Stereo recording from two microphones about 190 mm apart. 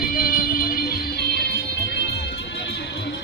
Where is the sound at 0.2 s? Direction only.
50° left (ahead or behind).